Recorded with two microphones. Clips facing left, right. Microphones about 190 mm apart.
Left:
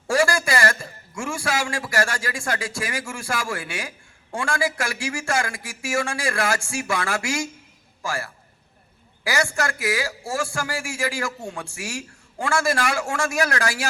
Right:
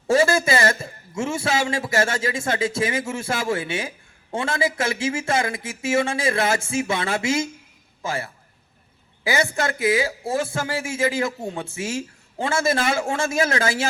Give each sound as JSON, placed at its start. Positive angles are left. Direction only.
{"t": 0.1, "sound": "a man's voice", "side_deg": -25}